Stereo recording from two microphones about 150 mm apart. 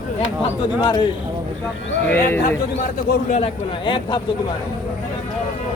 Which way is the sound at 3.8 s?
35° left (ahead or behind).